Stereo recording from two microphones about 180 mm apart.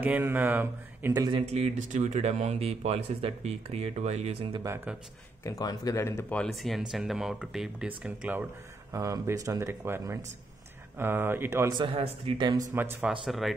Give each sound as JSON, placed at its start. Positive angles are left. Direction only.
{"t": 0.0, "sound": "speech", "side_deg": -10}
{"t": 1.4, "sound": "speech", "side_deg": -35}
{"t": 4.9, "sound": "speech", "side_deg": -5}
{"t": 5.4, "sound": "speech", "side_deg": 20}
{"t": 8.9, "sound": "speech", "side_deg": -20}
{"t": 11.8, "sound": "speech", "side_deg": -25}
{"t": 12.7, "sound": "speech", "side_deg": -10}